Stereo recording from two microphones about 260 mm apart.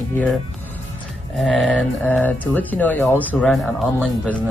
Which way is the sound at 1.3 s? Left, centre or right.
Centre.